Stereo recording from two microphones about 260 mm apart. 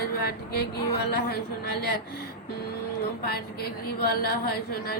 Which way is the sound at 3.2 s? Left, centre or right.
Left.